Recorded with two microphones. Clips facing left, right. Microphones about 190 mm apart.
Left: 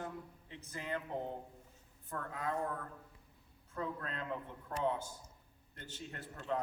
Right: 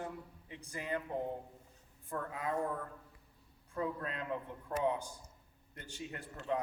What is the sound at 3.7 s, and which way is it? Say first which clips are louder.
A man's voice: right 3 dB; 10° right (ahead or behind).